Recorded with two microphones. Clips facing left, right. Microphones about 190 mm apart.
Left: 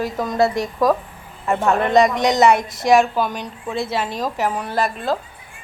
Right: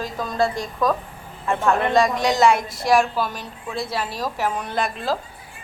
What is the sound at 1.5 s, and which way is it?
Speech, 20° left (ahead or behind).